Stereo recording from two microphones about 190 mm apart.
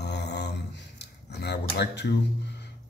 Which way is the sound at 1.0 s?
60° left (ahead or behind).